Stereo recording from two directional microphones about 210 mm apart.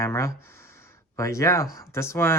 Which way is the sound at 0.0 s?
15° left (ahead or behind).